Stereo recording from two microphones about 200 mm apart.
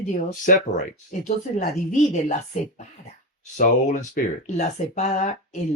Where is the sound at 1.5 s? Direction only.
35° left (ahead or behind).